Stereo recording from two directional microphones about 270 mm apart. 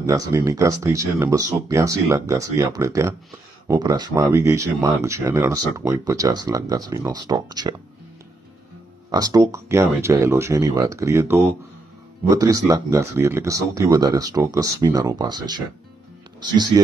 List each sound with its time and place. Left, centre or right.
0.0 s speech: centre
9.1 s speech: centre